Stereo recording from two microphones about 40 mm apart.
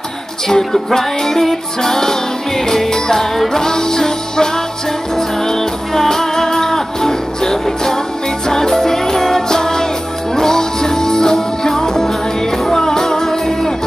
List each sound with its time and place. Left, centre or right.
0.5 s music: centre